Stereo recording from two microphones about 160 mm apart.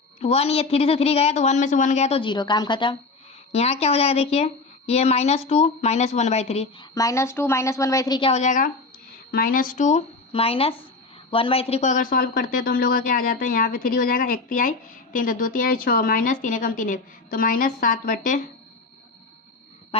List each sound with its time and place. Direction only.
0.2 s speech: 40° left (ahead or behind)
3.5 s speech: 40° left (ahead or behind)
6.9 s a woman's voice: 20° left (ahead or behind)
8.3 s speech: 50° left (ahead or behind)
9.3 s speech: 60° left (ahead or behind)
19.9 s a sound: 40° left (ahead or behind)